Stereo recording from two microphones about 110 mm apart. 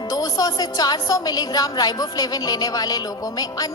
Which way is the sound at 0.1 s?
35° left (ahead or behind).